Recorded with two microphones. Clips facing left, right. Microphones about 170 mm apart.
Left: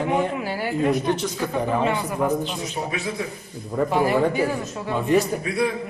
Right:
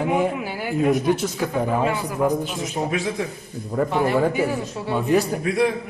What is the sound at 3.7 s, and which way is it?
A man's voice, centre (ahead or behind).